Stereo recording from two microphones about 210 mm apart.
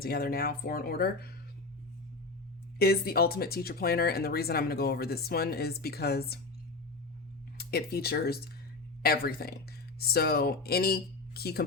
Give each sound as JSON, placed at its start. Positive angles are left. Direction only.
{"t": 0.0, "sound": "speech", "side_deg": 45}
{"t": 2.7, "sound": "speech", "side_deg": 45}
{"t": 7.6, "sound": "speech", "side_deg": 50}